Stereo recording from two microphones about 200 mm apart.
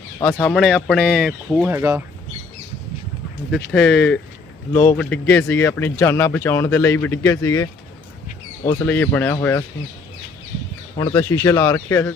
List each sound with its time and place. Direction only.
0.2 s speech: 5° left (ahead or behind); by 2.0 s 10° right (ahead or behind)
3.5 s speech: 5° left (ahead or behind)
8.8 s speech: 10° left (ahead or behind)
10.9 s speech: 20° left (ahead or behind)